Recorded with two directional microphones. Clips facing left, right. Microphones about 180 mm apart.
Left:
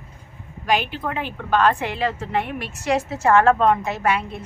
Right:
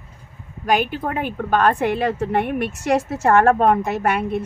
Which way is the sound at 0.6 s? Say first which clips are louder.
Right 3 dB; 50° right (ahead or behind).